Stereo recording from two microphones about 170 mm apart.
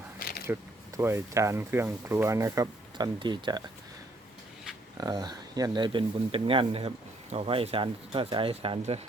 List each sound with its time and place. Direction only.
0.4 s speech: 15° right (ahead or behind)
4.9 s speech: 25° right (ahead or behind)